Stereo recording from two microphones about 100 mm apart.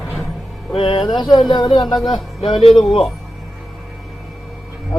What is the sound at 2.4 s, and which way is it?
Speech, 65° left (ahead or behind).